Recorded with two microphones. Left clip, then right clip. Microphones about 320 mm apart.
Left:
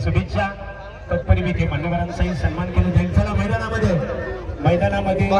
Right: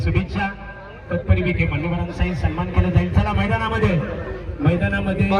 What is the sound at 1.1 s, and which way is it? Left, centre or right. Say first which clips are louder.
Speech: left 1 dB; left.